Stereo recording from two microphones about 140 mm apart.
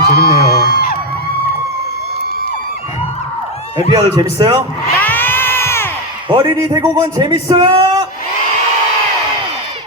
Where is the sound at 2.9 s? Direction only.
45° left (ahead or behind).